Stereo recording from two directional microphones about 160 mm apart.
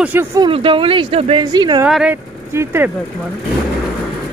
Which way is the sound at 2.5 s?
15° right (ahead or behind).